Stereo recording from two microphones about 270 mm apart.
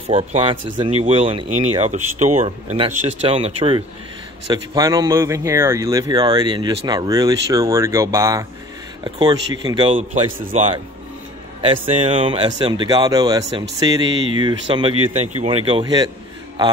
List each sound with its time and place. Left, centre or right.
0.1 s speech: centre
12.0 s speech: centre